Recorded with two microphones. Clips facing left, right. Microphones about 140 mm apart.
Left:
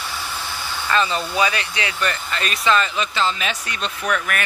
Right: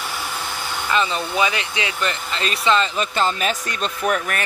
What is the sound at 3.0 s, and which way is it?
Speech, 45° right (ahead or behind).